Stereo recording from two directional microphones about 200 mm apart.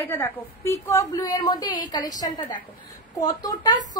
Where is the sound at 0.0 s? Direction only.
10° left (ahead or behind).